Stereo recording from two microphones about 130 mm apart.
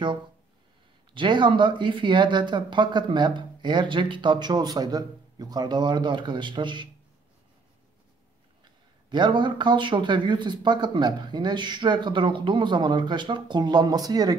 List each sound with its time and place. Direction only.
1.1 s speech: 35° right (ahead or behind)
8.6 s speech: 35° right (ahead or behind)